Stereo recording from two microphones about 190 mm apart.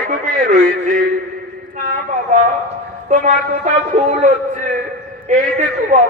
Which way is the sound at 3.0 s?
40° right (ahead or behind).